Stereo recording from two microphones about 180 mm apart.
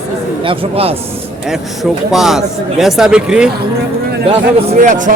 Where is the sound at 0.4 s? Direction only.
35° right (ahead or behind).